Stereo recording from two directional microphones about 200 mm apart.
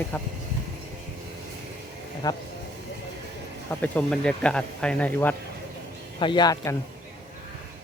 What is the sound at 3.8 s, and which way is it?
Speech, 5° left (ahead or behind).